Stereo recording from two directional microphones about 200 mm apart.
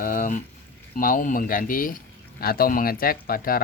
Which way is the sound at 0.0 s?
45° left (ahead or behind).